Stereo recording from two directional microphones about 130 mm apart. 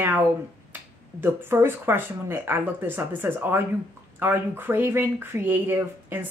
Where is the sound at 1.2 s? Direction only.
15° right (ahead or behind).